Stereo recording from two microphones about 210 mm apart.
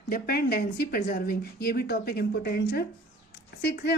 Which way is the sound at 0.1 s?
45° left (ahead or behind).